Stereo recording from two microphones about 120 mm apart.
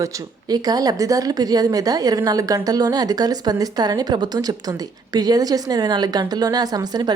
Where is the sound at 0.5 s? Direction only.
35° right (ahead or behind).